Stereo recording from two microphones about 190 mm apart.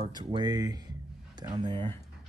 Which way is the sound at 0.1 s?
20° right (ahead or behind).